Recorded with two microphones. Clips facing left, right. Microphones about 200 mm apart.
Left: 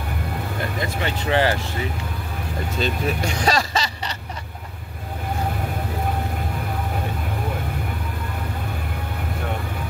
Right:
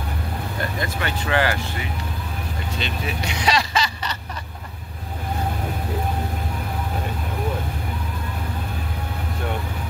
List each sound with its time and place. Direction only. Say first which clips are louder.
1.0 s speech: left 2 dB; 25° left (ahead or behind)
2.8 s speech: left 6 dB; 45° left (ahead or behind)